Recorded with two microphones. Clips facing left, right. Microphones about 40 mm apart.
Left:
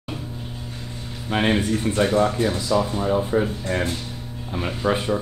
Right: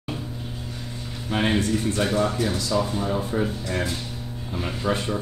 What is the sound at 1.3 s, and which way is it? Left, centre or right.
Speech, left.